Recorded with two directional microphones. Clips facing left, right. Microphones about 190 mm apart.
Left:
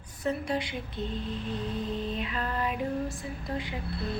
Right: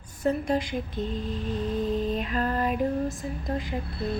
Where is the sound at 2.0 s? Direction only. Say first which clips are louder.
Right 5 dB; 45° right (ahead or behind).